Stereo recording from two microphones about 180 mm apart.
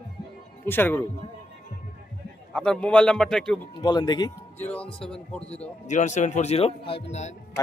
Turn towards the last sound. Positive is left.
turn(degrees=40)  # may be behind; listen again after turning